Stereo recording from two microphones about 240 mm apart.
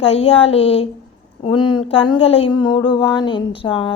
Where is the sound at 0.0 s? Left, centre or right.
Left.